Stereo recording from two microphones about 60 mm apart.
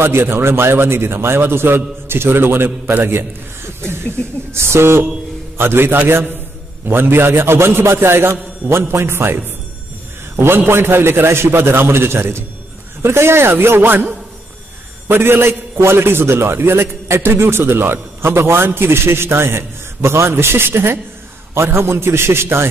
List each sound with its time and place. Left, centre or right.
0.0 s a man's voice: right
15.0 s a man's voice: right